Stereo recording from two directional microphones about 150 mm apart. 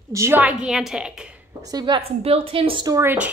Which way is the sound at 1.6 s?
30° right (ahead or behind).